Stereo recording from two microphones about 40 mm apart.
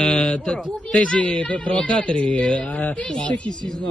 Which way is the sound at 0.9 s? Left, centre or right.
Left.